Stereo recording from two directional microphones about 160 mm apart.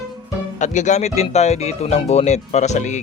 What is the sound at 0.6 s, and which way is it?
Speech, 50° left (ahead or behind).